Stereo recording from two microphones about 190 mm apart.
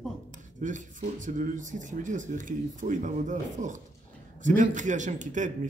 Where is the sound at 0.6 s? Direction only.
40° right (ahead or behind).